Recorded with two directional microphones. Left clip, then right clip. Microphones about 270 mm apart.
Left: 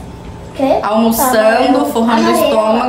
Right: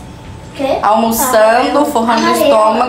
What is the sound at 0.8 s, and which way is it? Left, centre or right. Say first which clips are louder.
A woman's voice: right 1 dB; centre.